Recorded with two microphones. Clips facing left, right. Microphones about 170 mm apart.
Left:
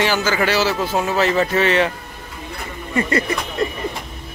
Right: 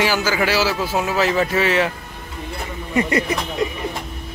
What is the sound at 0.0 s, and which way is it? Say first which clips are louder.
A man's voice: left 1 dB; 5° right (ahead or behind).